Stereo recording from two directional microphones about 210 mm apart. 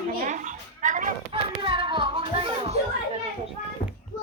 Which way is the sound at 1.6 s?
25° right (ahead or behind).